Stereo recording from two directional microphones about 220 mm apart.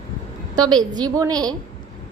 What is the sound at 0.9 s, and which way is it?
Speech, 15° right (ahead or behind).